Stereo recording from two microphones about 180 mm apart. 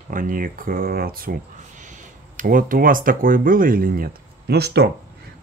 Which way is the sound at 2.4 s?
50° right (ahead or behind).